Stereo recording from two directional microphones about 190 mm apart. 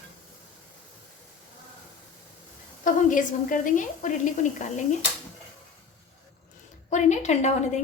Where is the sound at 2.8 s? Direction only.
45° left (ahead or behind).